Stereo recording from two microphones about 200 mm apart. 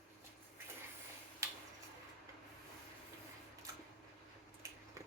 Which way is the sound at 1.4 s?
15° right (ahead or behind).